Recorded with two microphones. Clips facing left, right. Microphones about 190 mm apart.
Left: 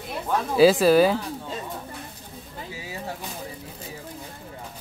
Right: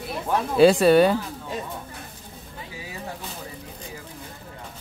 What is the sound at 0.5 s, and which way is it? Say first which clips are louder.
Speech: right 1 dB; centre (ahead or behind).